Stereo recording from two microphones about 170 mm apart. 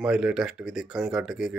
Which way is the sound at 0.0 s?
5° right (ahead or behind).